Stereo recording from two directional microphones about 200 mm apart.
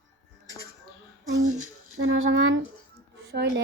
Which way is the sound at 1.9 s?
85° right.